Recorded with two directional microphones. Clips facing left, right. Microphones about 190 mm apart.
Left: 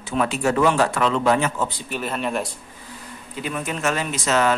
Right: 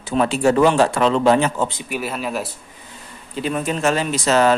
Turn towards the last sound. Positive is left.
turn(degrees=-35)  # may be behind; listen again after turning